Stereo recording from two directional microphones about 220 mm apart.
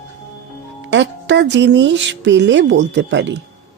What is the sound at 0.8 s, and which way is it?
Speech, 55° right (ahead or behind).